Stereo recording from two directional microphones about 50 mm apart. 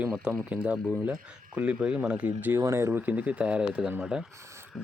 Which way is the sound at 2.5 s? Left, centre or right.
Right.